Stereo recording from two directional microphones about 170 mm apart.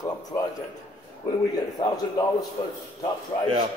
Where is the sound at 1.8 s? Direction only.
20° left (ahead or behind).